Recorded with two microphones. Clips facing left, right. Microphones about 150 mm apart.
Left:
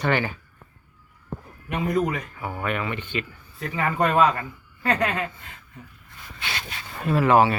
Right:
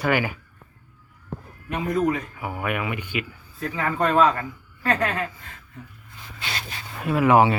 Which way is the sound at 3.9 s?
15° left (ahead or behind).